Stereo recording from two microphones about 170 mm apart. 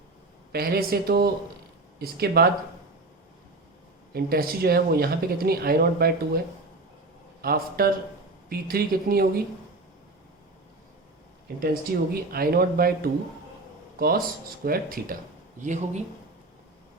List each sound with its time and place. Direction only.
0.5 s speech: 65° right (ahead or behind)
4.1 s speech: 60° right (ahead or behind)
7.4 s speech: 60° right (ahead or behind)
11.6 s speech: 65° right (ahead or behind)
15.6 s speech: 45° right (ahead or behind)